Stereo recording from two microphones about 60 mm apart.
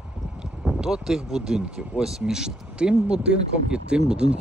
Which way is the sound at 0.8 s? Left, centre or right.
Centre.